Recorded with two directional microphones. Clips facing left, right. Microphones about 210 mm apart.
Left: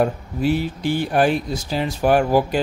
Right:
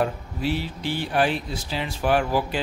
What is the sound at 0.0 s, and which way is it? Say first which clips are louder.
Speech: left 5 dB; 45° left (ahead or behind).